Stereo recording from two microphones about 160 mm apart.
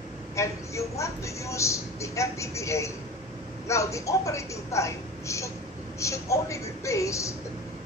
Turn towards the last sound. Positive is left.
turn(degrees=20)  # may be behind; listen again after turning